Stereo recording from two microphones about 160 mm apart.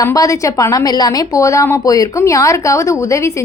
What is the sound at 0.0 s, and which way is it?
A woman's voice, 20° left (ahead or behind).